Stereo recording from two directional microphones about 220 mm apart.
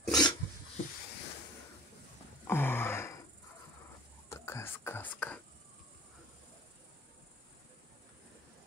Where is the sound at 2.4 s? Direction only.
10° left (ahead or behind).